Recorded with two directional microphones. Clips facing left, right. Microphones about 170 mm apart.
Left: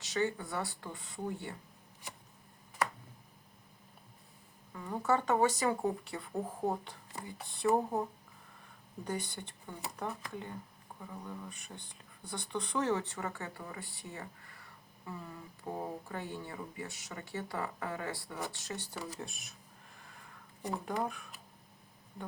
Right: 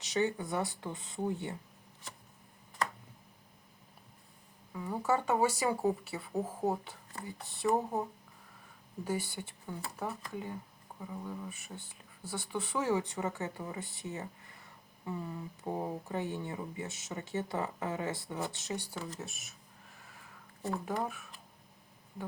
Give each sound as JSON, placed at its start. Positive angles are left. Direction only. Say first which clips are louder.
{"t": 0.0, "sound": "speech", "louder": "right 2 dB", "side_deg": -20}
{"t": 4.7, "sound": "speech", "louder": "even", "side_deg": -10}
{"t": 9.0, "sound": "speech", "louder": "right 3 dB", "side_deg": -5}
{"t": 18.9, "sound": "speech", "louder": "right 1 dB", "side_deg": 10}
{"t": 20.0, "sound": "a sound", "louder": "left 1 dB", "side_deg": 0}
{"t": 20.8, "sound": "speech", "louder": "even", "side_deg": 0}